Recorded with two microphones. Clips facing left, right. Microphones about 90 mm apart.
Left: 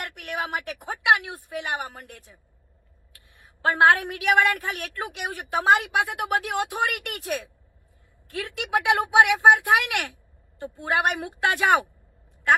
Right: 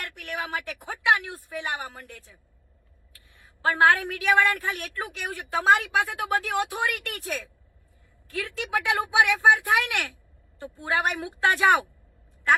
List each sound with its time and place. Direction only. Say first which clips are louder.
0.0 s a woman's voice: left 2 dB; 20° left (ahead or behind)
3.7 s a woman's voice: left 2 dB; 20° left (ahead or behind)